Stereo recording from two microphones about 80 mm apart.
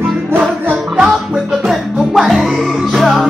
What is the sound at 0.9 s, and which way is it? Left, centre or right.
Music, centre.